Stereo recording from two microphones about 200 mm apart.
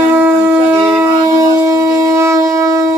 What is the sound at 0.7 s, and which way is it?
Shofar, 15° right (ahead or behind).